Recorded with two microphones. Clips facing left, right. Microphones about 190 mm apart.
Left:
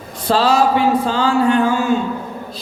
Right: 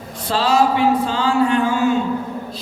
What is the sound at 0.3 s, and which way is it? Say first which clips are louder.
Speech: left 2 dB; 35° left (ahead or behind).